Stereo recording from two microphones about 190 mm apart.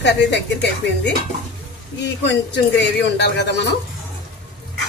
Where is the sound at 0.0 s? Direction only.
65° left (ahead or behind).